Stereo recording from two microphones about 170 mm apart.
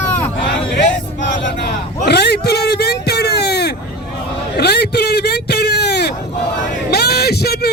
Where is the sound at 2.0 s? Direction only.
70° left (ahead or behind).